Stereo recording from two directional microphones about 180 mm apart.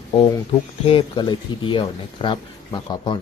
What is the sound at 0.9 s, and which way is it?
Speech, 30° left (ahead or behind).